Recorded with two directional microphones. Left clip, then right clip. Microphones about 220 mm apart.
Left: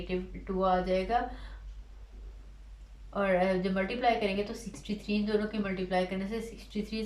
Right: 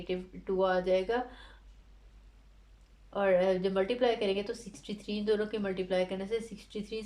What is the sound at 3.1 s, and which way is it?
Speech, 40° right (ahead or behind).